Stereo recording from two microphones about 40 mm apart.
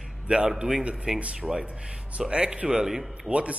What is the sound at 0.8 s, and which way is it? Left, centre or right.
Speech, right.